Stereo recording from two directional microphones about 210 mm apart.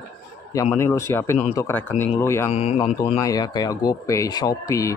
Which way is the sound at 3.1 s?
15° left (ahead or behind).